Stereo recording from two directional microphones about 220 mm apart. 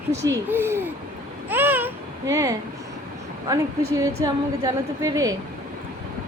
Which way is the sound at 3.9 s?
15° right (ahead or behind).